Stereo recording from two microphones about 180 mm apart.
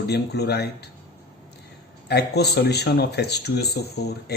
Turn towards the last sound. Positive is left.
turn(degrees=65)  # may be behind; listen again after turning